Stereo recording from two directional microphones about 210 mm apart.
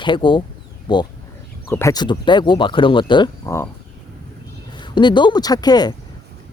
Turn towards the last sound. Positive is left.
turn(degrees=20)  # may be behind; listen again after turning